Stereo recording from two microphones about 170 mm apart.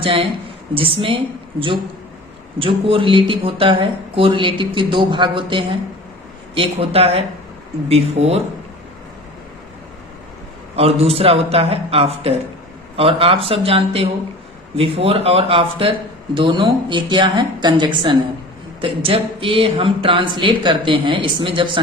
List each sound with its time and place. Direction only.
0.0 s a man's voice: 30° right (ahead or behind)
10.8 s a man's voice: 35° right (ahead or behind)